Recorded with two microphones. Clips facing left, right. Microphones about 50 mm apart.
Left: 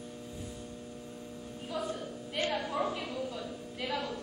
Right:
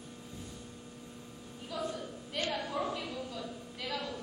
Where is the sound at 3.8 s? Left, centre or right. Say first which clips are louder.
Left 3 dB; centre.